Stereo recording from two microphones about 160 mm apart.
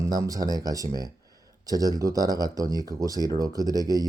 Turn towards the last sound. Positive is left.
turn(degrees=-25)  # may be behind; listen again after turning